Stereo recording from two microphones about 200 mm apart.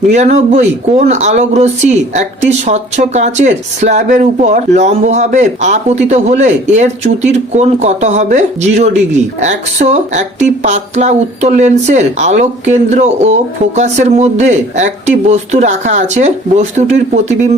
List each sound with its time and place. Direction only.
0.1 s speech: 35° right (ahead or behind)